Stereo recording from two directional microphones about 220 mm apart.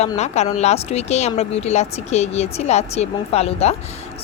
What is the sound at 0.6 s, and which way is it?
Speech, 30° left (ahead or behind).